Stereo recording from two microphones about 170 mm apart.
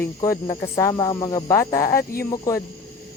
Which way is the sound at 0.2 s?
20° left (ahead or behind).